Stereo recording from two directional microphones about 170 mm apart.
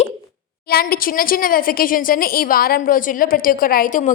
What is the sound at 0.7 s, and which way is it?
A woman's voice, 60° left (ahead or behind).